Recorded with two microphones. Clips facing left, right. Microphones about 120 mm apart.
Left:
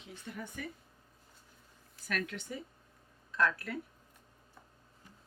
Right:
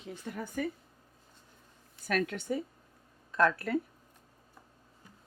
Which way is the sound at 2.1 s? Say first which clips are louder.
Right 7 dB; 50° right (ahead or behind).